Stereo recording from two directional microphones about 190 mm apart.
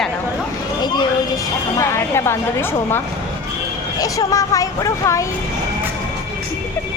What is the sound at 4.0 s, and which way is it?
Speech, 20° left (ahead or behind).